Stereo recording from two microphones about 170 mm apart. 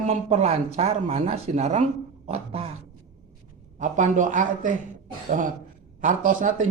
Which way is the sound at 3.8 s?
45° right (ahead or behind).